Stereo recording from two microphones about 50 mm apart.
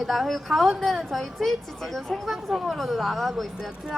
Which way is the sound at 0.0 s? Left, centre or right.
Centre.